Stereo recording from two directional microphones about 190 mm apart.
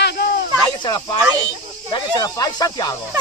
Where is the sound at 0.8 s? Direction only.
20° left (ahead or behind).